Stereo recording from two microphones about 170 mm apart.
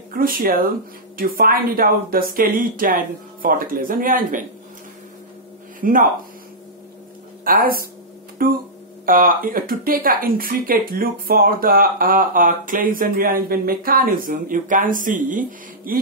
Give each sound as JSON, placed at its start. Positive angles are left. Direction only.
{"t": 0.1, "sound": "speech", "side_deg": -60}
{"t": 5.8, "sound": "speech", "side_deg": -55}
{"t": 7.4, "sound": "speech", "side_deg": -60}